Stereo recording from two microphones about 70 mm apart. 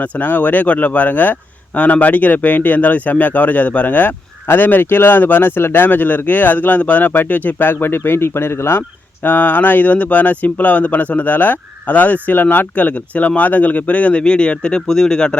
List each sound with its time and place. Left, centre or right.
0.0 s speech: left
9.2 s speech: left